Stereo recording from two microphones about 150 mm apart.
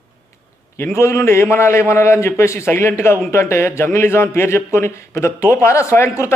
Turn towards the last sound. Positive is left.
turn(degrees=20)  # may be behind; listen again after turning